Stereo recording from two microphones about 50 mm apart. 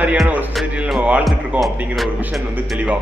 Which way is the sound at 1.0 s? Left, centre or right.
Right.